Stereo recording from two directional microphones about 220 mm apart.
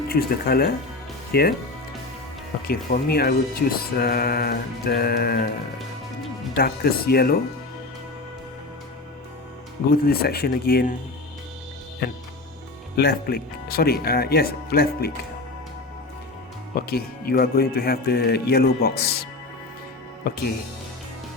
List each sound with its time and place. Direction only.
0.1 s speech: 45° left (ahead or behind)
2.6 s speech: 45° left (ahead or behind)
6.6 s speech: 45° left (ahead or behind)
9.9 s speech: 45° left (ahead or behind)
13.0 s speech: 45° left (ahead or behind)
16.7 s speech: 45° left (ahead or behind)
20.2 s speech: 45° left (ahead or behind)